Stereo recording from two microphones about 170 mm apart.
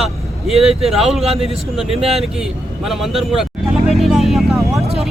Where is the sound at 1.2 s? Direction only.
35° right (ahead or behind).